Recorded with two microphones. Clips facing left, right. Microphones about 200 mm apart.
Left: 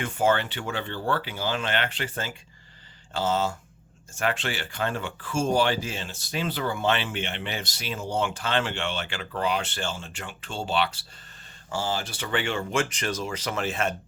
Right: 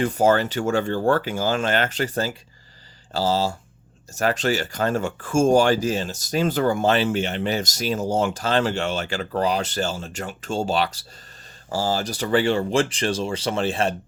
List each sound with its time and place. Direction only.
0.0 s speech: 40° right (ahead or behind)